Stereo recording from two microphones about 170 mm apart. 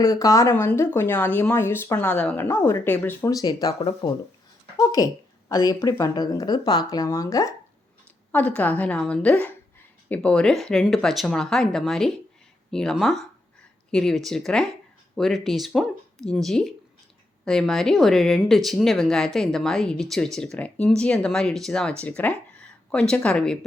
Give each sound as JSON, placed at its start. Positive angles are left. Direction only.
{"t": 0.0, "sound": "speech", "side_deg": 20}
{"t": 8.3, "sound": "speech", "side_deg": 10}